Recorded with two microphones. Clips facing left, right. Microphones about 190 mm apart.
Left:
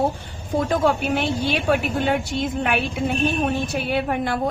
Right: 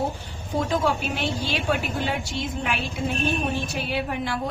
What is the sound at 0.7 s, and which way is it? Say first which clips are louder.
A woman's voice: left 5 dB; 55° left (ahead or behind).